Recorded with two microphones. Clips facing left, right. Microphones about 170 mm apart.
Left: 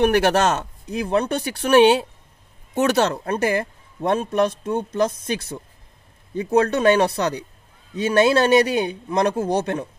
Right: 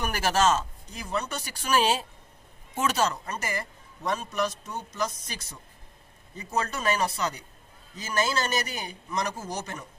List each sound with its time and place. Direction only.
0.0 s a man's voice: 65° left (ahead or behind)